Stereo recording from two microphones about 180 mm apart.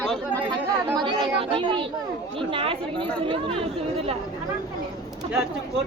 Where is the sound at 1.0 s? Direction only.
30° right (ahead or behind).